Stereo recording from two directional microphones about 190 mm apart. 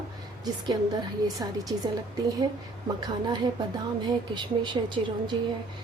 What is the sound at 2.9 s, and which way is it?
A woman's voice, 20° right (ahead or behind).